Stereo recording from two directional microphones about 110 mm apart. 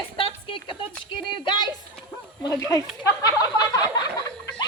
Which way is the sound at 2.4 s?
35° left (ahead or behind).